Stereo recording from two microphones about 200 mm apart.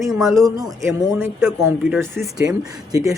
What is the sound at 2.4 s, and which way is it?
Speech, 20° right (ahead or behind).